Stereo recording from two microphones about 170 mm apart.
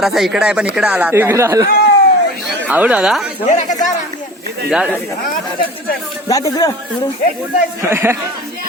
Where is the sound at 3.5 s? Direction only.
45° left (ahead or behind).